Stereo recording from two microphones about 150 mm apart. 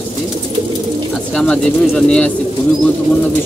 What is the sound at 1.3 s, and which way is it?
Speech, 5° left (ahead or behind).